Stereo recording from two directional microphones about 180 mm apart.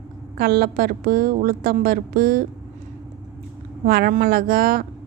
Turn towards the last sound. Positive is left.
turn(degrees=-55)  # may be behind; listen again after turning